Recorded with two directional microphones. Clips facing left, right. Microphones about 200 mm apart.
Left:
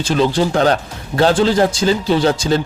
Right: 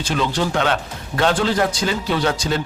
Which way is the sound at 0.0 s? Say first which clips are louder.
Left 6 dB; 35° left (ahead or behind).